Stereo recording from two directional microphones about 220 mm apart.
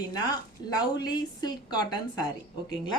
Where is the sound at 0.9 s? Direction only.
20° left (ahead or behind).